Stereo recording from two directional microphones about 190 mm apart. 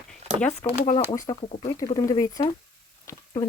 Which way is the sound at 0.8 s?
35° left (ahead or behind).